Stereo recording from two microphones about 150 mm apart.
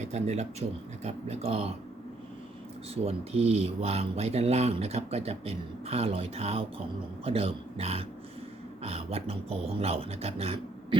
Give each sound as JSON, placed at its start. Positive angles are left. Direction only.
{"t": 0.0, "sound": "speech", "side_deg": -50}
{"t": 2.9, "sound": "speech", "side_deg": -45}